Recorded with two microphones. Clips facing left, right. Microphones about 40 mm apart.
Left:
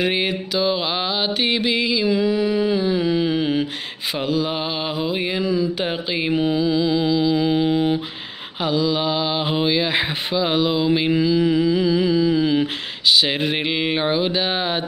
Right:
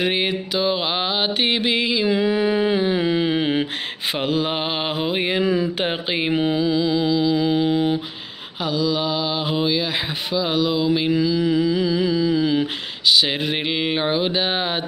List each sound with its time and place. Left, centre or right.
0.0 s mantra: centre; by 3.6 s right
4.2 s mantra: right
6.6 s music: centre
8.6 s mantra: centre